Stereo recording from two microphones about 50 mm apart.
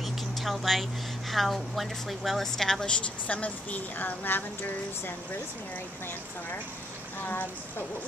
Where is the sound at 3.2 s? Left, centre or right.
Left.